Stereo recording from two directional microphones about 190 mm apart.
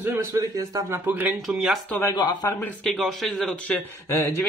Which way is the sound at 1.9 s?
20° left (ahead or behind).